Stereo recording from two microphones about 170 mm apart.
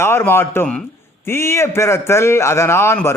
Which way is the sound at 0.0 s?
15° left (ahead or behind).